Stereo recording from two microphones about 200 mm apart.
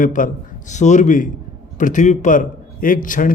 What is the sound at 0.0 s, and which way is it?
A man's voice, 45° left (ahead or behind).